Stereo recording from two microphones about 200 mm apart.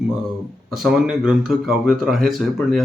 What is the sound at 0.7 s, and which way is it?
Speech, centre (ahead or behind).